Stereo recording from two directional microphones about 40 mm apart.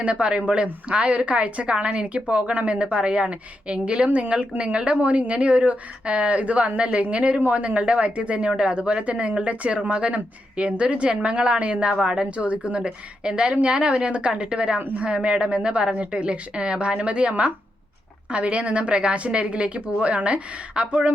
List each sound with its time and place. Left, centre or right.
0.0 s a woman's voice: right